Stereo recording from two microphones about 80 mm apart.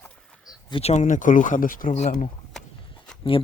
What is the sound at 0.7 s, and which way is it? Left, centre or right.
Speech, left.